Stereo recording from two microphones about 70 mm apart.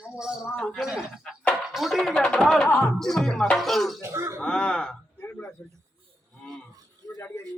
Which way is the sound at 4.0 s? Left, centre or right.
Right.